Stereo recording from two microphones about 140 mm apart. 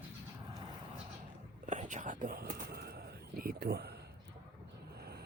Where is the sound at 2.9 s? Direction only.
90° right.